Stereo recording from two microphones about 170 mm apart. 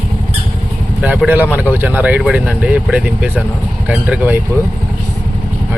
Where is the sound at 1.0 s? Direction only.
10° right (ahead or behind).